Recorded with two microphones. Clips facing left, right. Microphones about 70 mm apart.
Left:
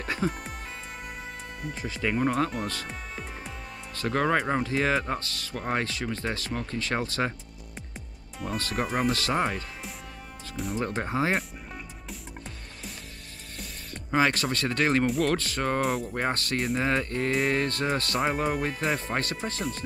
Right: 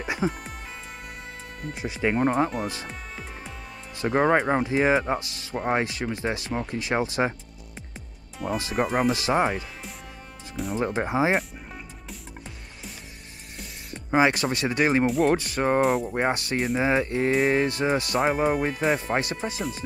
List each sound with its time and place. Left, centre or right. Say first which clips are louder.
0.0 s music: right 2 dB; centre
1.7 s speech: right 4 dB; centre
2.9 s music: even; centre
3.9 s speech: right 4 dB; centre
8.5 s speech: right 4 dB; centre
10.8 s speech: right 4 dB; centre
11.3 s music: right 4 dB; centre
13.6 s speech: right 1 dB; centre
15.8 s speech: right 5 dB; centre
16.1 s speech: right 4 dB; centre
16.5 s speech: right 3 dB; centre
16.8 s speech: right 4 dB; centre